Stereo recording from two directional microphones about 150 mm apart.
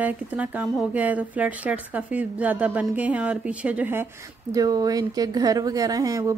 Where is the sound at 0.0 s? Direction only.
10° right (ahead or behind).